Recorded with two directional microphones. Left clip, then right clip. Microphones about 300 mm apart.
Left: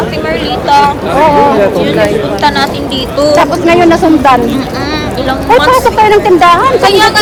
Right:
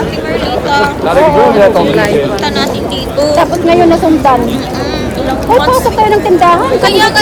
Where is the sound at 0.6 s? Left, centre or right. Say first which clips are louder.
Left 5 dB; left.